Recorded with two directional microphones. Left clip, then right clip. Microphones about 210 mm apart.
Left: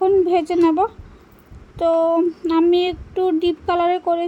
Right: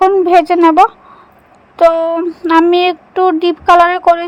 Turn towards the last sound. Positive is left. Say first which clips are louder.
# right 10 dB
turn(degrees=-20)  # may be behind; listen again after turning